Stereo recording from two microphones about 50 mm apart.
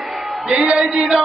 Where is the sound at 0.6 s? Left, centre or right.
Centre.